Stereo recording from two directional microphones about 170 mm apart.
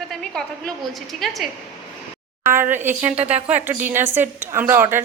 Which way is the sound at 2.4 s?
15° right (ahead or behind).